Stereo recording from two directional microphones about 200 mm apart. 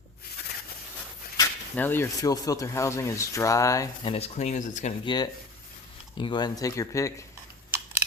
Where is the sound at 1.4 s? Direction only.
10° left (ahead or behind).